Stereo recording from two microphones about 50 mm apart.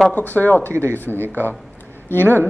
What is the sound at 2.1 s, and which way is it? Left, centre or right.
Speech, left.